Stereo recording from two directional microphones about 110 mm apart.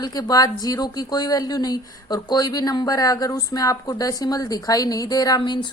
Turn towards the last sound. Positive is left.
turn(degrees=40)  # may be behind; listen again after turning